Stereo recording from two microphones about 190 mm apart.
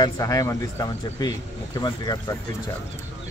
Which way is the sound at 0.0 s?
15° left (ahead or behind).